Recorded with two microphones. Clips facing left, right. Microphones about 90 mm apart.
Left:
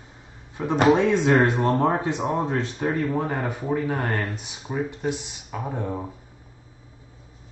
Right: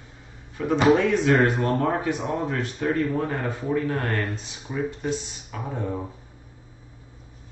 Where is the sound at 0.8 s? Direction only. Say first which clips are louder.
Left 1 dB; 25° left (ahead or behind).